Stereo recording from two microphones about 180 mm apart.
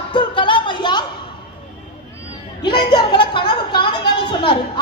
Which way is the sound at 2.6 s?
25° left (ahead or behind).